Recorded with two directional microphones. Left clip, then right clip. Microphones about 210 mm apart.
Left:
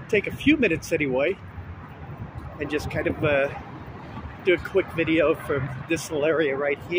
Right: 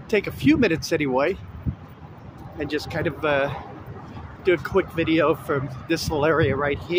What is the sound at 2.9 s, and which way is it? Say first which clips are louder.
Speech: even; 15° right (ahead or behind).